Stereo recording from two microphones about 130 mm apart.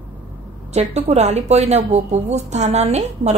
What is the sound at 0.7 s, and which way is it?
A woman's voice, 60° right (ahead or behind).